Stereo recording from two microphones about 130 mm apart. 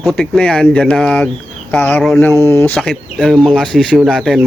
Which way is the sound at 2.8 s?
Centre (ahead or behind).